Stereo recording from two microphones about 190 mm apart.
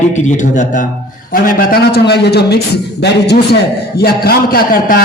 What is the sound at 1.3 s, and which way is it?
A man's voice, 50° left (ahead or behind).